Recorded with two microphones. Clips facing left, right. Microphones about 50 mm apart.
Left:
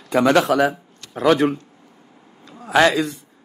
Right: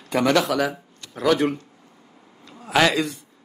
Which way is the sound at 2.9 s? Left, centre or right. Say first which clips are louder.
Left 2 dB; left.